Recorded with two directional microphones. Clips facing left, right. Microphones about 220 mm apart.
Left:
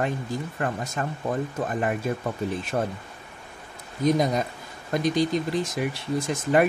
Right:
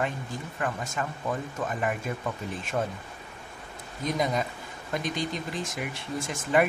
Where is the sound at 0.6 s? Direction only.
40° left (ahead or behind).